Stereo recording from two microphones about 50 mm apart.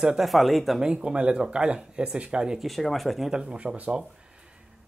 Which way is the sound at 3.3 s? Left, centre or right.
Centre.